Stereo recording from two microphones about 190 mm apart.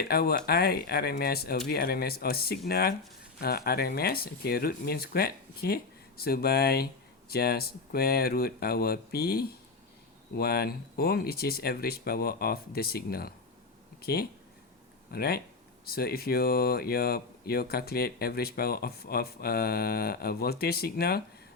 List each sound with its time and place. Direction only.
0.0 s speech: 55° left (ahead or behind)